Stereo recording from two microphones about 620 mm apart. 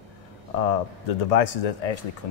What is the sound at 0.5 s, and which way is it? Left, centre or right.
Speech, left.